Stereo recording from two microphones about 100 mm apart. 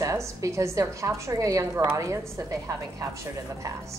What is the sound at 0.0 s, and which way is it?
Speech, 30° right (ahead or behind).